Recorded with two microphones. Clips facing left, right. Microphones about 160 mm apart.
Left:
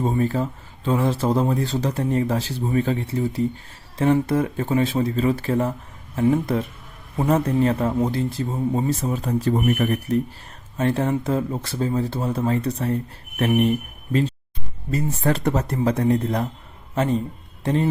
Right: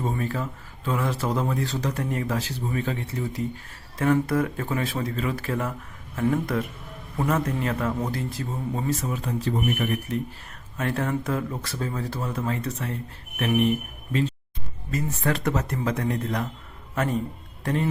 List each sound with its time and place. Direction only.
0.0 s speech: 30° left (ahead or behind)
10.8 s speech: 30° left (ahead or behind)
14.1 s a man's voice: 40° left (ahead or behind)